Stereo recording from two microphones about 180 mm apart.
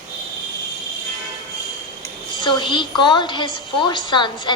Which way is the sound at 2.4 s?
25° left (ahead or behind).